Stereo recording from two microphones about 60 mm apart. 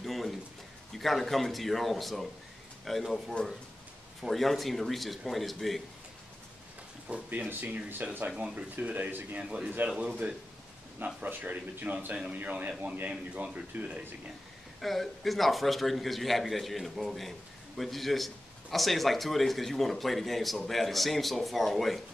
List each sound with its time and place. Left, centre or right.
0.0 s a sound: centre
0.9 s a man's voice: centre
7.2 s speech: right
9.8 s speech: centre
11.2 s speech: right
14.8 s a man's voice: centre